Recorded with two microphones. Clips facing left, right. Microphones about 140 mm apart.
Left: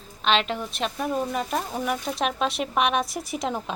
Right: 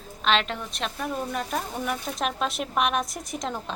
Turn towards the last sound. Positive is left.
turn(degrees=5)  # may be behind; listen again after turning